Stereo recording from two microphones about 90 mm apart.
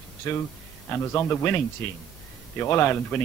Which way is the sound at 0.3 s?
25° left (ahead or behind).